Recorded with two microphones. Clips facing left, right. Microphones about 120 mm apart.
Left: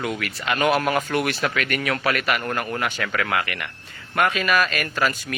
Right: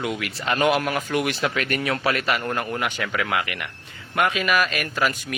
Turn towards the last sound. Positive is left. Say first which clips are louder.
# even
turn(degrees=-15)  # may be behind; listen again after turning